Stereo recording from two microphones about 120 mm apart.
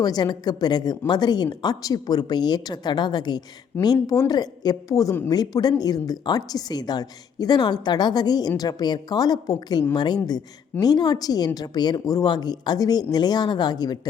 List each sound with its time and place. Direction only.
0.0 s a woman's voice: 35° left (ahead or behind)